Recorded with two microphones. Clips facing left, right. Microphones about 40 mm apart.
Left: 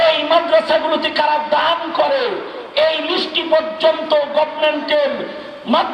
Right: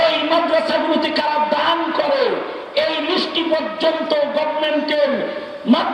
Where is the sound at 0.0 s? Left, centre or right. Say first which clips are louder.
Left 2 dB; left.